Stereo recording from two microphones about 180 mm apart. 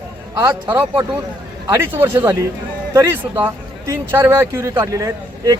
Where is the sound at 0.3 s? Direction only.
20° right (ahead or behind).